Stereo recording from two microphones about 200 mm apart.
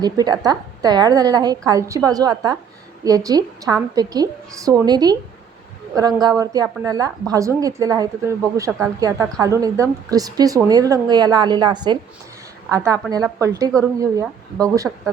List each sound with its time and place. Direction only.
0.0 s a woman's voice: 20° right (ahead or behind)